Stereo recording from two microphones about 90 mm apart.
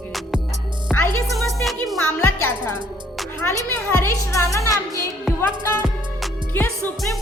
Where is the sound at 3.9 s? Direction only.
30° left (ahead or behind).